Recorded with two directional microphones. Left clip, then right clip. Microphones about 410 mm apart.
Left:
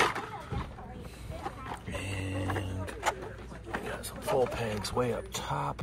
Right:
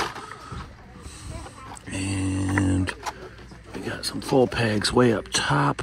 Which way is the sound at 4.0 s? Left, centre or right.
Right.